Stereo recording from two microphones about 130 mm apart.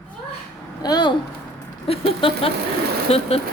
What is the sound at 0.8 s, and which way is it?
Speech, 35° left (ahead or behind).